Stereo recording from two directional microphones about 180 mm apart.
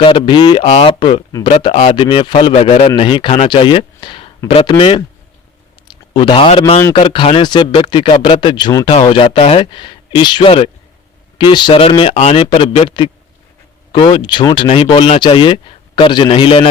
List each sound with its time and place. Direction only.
0.0 s speech: 30° left (ahead or behind)
6.1 s speech: 30° left (ahead or behind)